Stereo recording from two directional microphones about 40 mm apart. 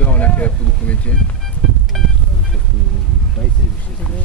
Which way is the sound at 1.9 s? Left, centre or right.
Centre.